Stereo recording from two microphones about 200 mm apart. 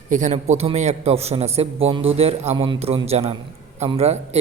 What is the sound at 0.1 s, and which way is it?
A man's voice, 35° right (ahead or behind).